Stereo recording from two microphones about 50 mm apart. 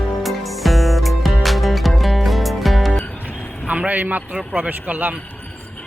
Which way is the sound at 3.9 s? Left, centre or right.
Right.